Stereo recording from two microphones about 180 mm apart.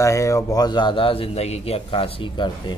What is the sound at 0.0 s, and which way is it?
A man's voice, 15° left (ahead or behind).